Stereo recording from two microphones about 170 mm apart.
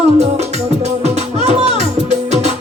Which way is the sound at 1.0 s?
40° right (ahead or behind).